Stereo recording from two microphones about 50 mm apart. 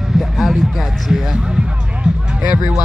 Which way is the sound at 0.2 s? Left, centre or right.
Centre.